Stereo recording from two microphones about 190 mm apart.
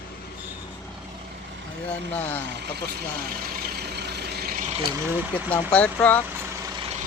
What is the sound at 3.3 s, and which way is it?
Vehicle, 50° right (ahead or behind).